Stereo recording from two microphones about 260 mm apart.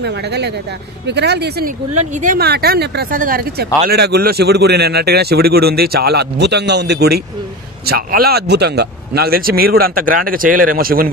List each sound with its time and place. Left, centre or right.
0.0 s speech: right
2.0 s speech: right